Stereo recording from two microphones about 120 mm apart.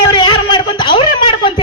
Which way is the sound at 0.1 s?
40° left (ahead or behind).